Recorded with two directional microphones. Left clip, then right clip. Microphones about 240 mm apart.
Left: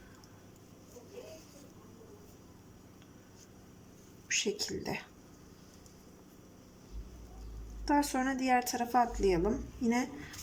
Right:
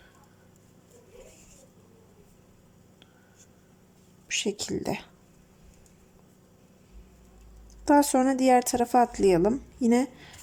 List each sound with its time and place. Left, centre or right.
4.3 s speech: centre
7.9 s speech: right